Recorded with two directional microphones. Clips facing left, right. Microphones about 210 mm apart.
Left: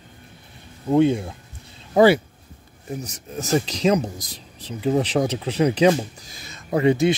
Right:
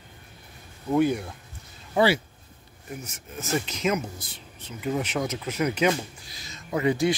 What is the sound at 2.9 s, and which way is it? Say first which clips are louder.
Speech: left 7 dB; 35° left (ahead or behind).